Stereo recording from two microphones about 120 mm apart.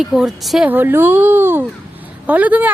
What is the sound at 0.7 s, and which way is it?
Speech, 15° right (ahead or behind).